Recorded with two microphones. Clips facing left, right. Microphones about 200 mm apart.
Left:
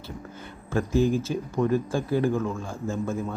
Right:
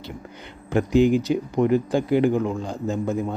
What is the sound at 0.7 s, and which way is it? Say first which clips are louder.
Speech: right 5 dB; 20° right (ahead or behind).